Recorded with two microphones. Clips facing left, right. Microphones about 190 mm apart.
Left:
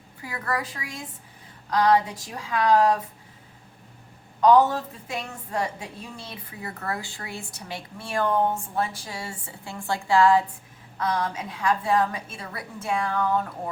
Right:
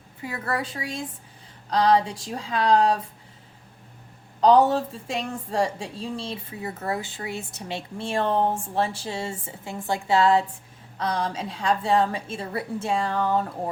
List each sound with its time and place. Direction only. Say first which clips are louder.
0.2 s a woman's voice: right 1 dB; 25° right (ahead or behind)
4.4 s a woman's voice: right 1 dB; 30° right (ahead or behind)